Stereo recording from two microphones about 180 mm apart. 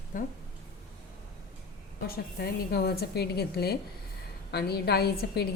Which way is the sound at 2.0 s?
55° left (ahead or behind).